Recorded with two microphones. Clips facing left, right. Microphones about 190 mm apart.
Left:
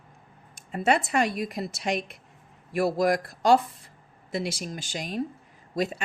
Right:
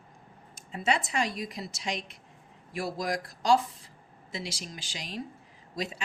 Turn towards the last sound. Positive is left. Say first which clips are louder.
# left 7 dB
turn(degrees=55)  # may be behind; listen again after turning